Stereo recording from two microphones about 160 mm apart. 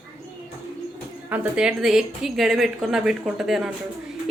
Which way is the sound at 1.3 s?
10° right (ahead or behind).